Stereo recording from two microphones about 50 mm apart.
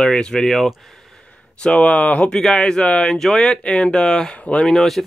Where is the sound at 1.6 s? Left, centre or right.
Left.